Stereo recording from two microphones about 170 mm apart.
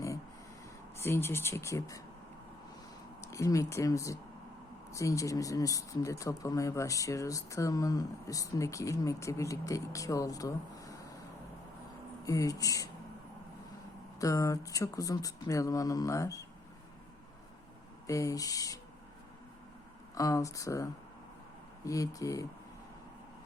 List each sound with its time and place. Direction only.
0.9 s speech: 15° left (ahead or behind)
3.2 s speech: 20° left (ahead or behind)
12.2 s speech: 20° left (ahead or behind)
14.2 s speech: 20° left (ahead or behind)
18.0 s speech: 20° left (ahead or behind)
20.1 s speech: 20° left (ahead or behind)